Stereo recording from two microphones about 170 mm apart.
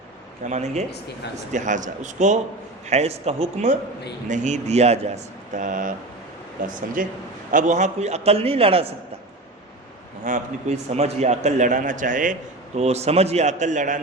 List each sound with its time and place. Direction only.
0.4 s a man's voice: 40° right (ahead or behind)
7.0 s a man's voice: 55° right (ahead or behind); by 8.9 s 35° right (ahead or behind)
10.2 s a man's voice: 45° right (ahead or behind)